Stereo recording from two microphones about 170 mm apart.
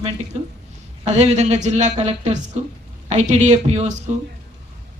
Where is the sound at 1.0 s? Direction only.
40° right (ahead or behind).